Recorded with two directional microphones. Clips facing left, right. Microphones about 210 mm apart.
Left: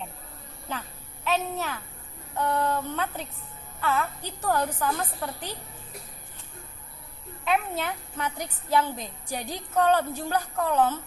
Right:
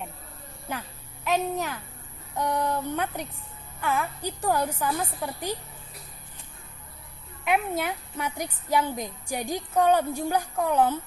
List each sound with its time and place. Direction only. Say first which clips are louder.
0.7 s a woman's voice: right 1 dB; 10° right (ahead or behind)
7.4 s a woman's voice: right 1 dB; 10° right (ahead or behind)